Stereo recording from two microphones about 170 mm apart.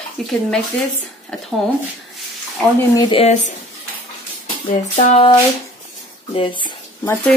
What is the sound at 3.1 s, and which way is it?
Speech, 40° left (ahead or behind).